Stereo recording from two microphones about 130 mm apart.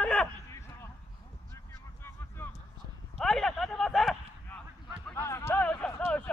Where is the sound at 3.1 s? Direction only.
Centre (ahead or behind).